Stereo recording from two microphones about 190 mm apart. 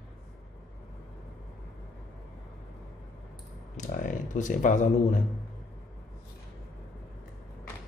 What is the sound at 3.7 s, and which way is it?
A man's voice, 40° left (ahead or behind).